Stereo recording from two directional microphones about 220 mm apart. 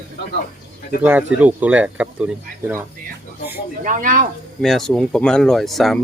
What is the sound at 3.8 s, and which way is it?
Speech, 35° right (ahead or behind).